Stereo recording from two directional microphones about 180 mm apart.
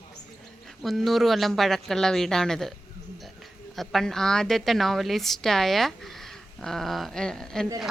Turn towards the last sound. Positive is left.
turn(degrees=5)  # may be behind; listen again after turning